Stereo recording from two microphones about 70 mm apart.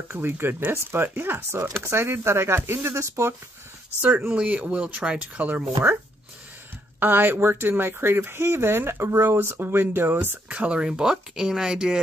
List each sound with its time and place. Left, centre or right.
0.1 s speech: right
4.4 s speech: centre
7.0 s speech: right
10.5 s speech: centre